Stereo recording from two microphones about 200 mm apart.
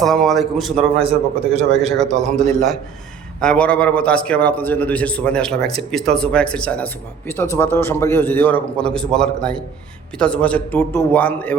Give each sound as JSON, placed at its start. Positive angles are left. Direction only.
{"t": 0.0, "sound": "a man's voice", "side_deg": 0}
{"t": 0.9, "sound": "a man's voice", "side_deg": -30}
{"t": 1.8, "sound": "a man's voice", "side_deg": 0}